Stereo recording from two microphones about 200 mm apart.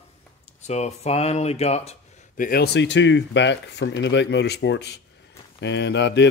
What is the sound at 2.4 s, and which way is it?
Speech, 50° left (ahead or behind).